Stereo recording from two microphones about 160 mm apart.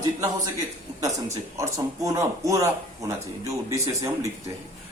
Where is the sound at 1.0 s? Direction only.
20° right (ahead or behind).